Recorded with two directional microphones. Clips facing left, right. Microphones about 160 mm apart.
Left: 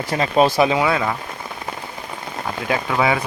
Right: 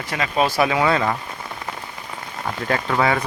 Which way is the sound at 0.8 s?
5° left (ahead or behind).